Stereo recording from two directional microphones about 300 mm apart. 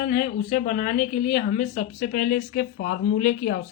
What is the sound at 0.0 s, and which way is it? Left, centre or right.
A woman's voice, left.